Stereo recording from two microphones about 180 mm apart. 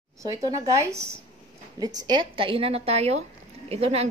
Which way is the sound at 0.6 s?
15° right (ahead or behind).